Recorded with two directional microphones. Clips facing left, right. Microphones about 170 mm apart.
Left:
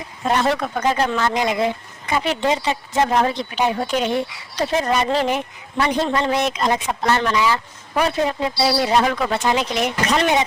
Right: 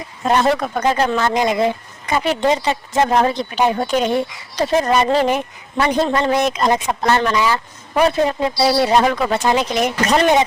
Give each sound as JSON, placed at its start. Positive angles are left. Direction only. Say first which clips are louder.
{"t": 0.3, "sound": "speech", "louder": "right 3 dB", "side_deg": -45}